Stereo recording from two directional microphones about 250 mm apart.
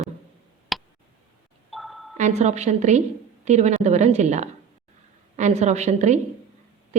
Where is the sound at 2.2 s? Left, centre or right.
Right.